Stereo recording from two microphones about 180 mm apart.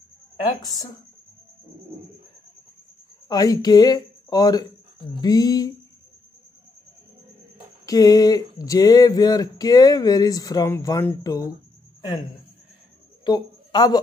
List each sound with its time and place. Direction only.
3.3 s speech: 20° left (ahead or behind)
7.8 s speech: 20° left (ahead or behind)
13.2 s a sound: 25° left (ahead or behind)